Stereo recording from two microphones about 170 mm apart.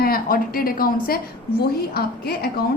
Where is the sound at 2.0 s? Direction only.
65° left (ahead or behind).